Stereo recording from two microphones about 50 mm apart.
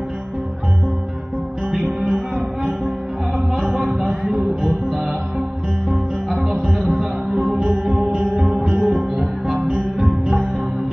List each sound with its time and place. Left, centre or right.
1.7 s music: centre
8.0 s music: centre
8.4 s music: centre